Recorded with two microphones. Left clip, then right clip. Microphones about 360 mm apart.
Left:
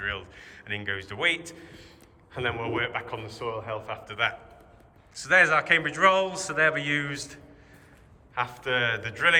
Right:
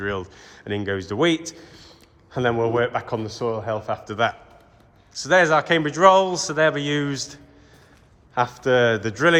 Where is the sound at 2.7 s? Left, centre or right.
Centre.